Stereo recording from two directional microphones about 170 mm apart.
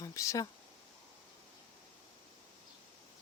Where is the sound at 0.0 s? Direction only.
20° left (ahead or behind).